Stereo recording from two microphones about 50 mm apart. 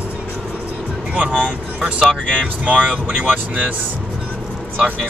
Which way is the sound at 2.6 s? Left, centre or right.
Right.